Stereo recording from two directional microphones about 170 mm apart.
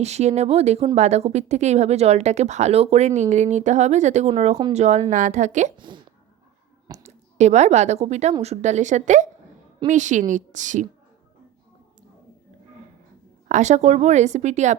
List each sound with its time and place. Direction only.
0.0 s speech: 40° right (ahead or behind)
5.7 s speech: 30° right (ahead or behind)
6.8 s a sound: 20° right (ahead or behind)
7.3 s speech: 40° right (ahead or behind)
13.5 s speech: 45° right (ahead or behind)